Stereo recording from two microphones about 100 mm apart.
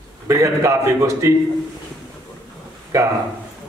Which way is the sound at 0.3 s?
30° right (ahead or behind).